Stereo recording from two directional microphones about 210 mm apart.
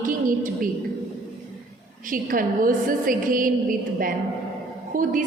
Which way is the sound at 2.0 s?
40° right (ahead or behind).